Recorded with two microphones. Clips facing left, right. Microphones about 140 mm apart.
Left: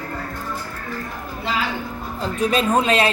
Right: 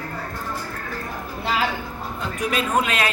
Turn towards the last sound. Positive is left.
turn(degrees=30)  # may be behind; listen again after turning